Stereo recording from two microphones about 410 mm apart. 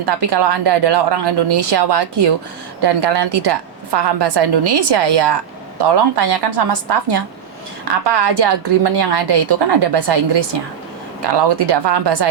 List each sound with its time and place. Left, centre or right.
0.0 s a woman's voice: right